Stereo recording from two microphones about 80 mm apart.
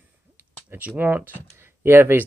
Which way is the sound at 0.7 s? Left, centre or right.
Right.